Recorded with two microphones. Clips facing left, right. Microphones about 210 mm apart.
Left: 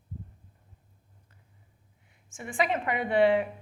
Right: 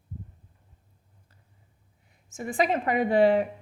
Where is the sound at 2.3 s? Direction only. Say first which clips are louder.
Right 3 dB; 40° right (ahead or behind).